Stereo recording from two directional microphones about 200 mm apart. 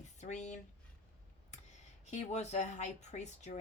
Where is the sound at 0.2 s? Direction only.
35° left (ahead or behind).